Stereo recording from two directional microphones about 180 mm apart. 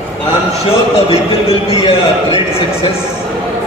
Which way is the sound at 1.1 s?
30° left (ahead or behind).